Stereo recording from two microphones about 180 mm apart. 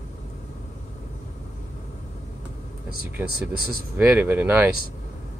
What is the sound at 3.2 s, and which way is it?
Speech, 60° right (ahead or behind).